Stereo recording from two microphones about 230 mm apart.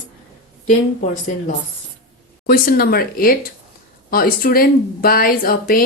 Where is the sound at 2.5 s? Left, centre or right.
Left.